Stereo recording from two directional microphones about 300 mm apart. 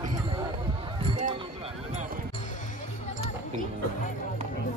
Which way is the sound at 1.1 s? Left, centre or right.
Centre.